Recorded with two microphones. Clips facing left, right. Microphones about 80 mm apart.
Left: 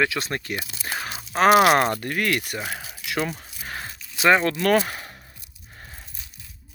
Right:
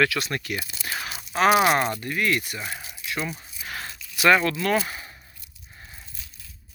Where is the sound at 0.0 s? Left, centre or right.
Left.